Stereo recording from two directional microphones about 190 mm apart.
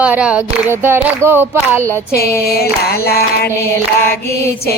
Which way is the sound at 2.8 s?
55° left (ahead or behind).